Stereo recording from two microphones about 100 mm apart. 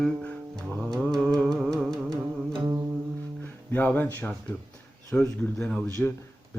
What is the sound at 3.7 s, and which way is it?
Speech, 20° left (ahead or behind).